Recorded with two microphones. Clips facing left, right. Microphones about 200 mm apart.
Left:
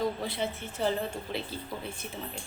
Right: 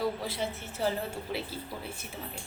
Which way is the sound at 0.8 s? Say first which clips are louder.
Left 1 dB; 10° right (ahead or behind).